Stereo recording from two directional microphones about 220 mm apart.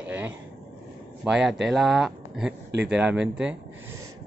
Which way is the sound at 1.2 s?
Centre (ahead or behind).